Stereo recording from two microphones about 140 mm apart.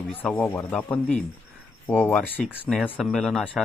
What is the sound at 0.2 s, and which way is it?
Speech, 10° left (ahead or behind).